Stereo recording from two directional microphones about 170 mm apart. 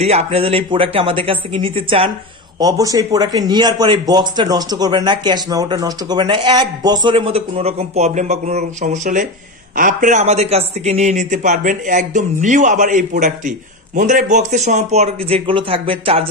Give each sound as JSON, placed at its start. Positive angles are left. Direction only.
{"t": 0.0, "sound": "a man's voice", "side_deg": -35}
{"t": 2.6, "sound": "a man's voice", "side_deg": -20}